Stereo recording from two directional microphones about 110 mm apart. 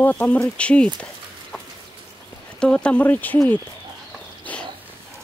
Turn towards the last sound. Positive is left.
turn(degrees=15)  # may be behind; listen again after turning